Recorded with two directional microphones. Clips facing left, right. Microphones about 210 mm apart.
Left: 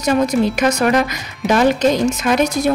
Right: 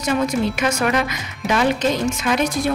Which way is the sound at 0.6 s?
40° left (ahead or behind).